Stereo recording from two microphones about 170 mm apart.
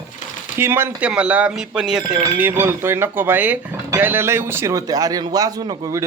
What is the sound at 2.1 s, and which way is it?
Speech, 15° right (ahead or behind).